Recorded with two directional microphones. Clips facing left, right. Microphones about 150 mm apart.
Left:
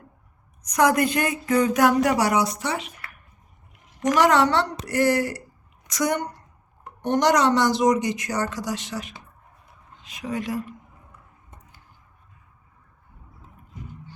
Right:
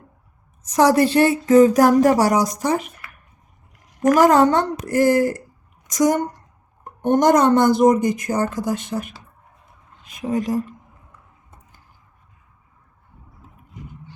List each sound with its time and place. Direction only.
0.7 s speech: 35° right (ahead or behind)
1.8 s a woman's voice: 40° right (ahead or behind)
4.1 s a woman's voice: 45° right (ahead or behind)